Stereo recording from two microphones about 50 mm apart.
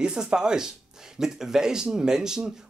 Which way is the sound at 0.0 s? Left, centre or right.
Centre.